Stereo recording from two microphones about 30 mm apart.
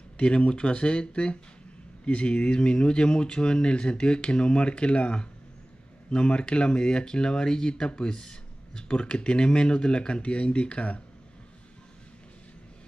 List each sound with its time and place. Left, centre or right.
0.4 s speech: left